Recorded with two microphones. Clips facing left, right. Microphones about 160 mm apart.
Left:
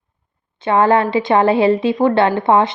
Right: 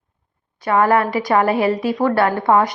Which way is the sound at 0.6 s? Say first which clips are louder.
Left 2 dB; 25° left (ahead or behind).